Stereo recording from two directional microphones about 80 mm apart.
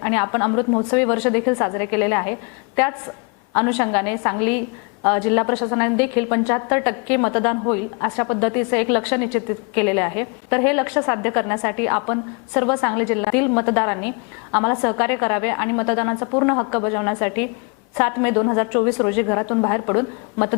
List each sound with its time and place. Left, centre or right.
0.0 s a woman's voice: left